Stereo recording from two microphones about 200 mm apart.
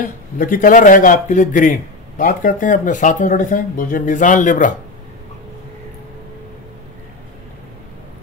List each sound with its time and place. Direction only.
0.0 s speech: 45° left (ahead or behind)